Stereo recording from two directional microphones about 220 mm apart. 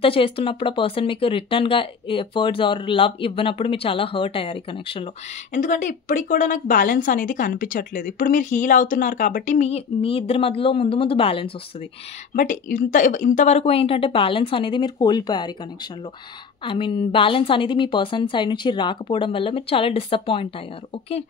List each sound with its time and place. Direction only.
0.0 s speech: 25° left (ahead or behind)
5.6 s speech: 35° left (ahead or behind)
12.4 s speech: 35° left (ahead or behind); by 15.5 s 20° left (ahead or behind)
16.6 s speech: 25° left (ahead or behind)